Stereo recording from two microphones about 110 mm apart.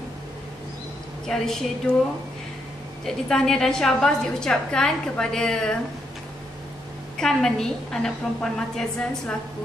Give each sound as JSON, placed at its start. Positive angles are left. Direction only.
{"t": 1.2, "sound": "a woman's voice", "side_deg": 5}
{"t": 3.1, "sound": "a woman's voice", "side_deg": 5}
{"t": 7.2, "sound": "a woman's voice", "side_deg": 5}